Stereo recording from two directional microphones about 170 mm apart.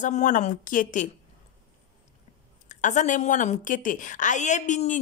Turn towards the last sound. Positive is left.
turn(degrees=45)  # may be behind; listen again after turning